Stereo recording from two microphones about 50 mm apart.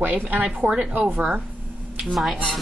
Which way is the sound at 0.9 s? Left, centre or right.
Right.